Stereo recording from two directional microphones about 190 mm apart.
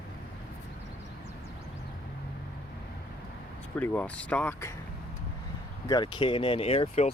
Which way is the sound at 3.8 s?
5° left (ahead or behind).